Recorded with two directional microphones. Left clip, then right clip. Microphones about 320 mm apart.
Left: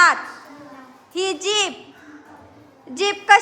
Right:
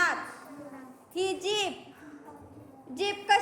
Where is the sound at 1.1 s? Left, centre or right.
Centre.